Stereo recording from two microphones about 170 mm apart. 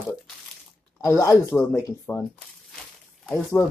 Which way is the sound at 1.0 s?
15° left (ahead or behind).